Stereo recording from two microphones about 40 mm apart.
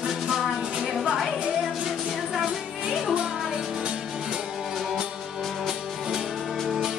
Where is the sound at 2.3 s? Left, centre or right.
Centre.